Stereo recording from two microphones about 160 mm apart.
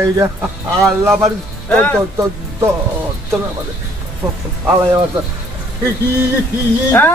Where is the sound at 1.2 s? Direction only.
10° left (ahead or behind).